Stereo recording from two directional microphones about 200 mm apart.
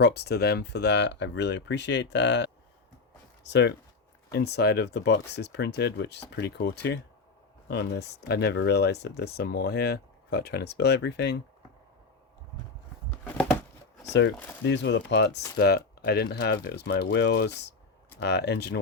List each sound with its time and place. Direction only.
0.0 s speech: 55° left (ahead or behind)
13.2 s a sound: 10° left (ahead or behind)
14.6 s speech: 60° left (ahead or behind)